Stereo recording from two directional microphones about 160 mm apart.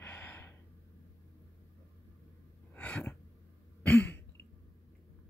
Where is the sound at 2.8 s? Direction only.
10° left (ahead or behind).